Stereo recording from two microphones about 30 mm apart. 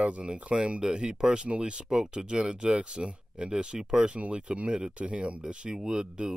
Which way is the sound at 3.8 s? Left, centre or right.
Right.